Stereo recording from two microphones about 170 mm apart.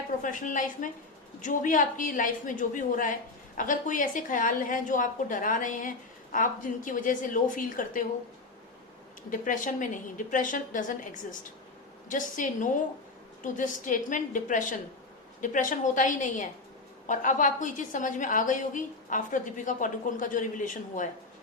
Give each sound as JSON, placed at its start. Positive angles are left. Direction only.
{"t": 0.2, "sound": "a woman's voice", "side_deg": 50}
{"t": 9.3, "sound": "a woman's voice", "side_deg": 50}